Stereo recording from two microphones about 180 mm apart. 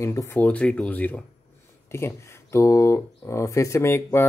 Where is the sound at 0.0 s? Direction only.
15° left (ahead or behind).